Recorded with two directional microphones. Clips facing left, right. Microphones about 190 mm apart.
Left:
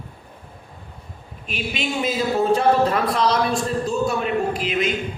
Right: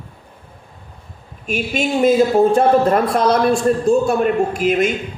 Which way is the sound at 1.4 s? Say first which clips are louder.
Right 7 dB; 45° right (ahead or behind).